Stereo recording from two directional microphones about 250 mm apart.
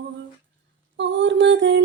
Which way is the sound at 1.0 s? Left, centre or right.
Right.